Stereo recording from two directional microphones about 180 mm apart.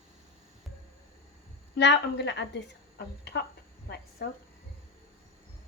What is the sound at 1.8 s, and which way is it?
Speech, 75° left (ahead or behind).